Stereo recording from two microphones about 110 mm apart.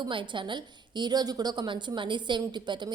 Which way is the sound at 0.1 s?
50° right (ahead or behind).